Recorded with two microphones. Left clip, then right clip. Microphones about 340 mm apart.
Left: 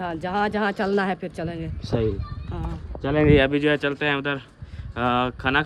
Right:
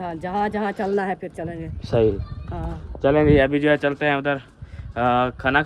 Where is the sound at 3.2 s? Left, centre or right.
Centre.